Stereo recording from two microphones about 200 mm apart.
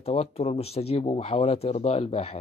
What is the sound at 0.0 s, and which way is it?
Speech, 30° left (ahead or behind).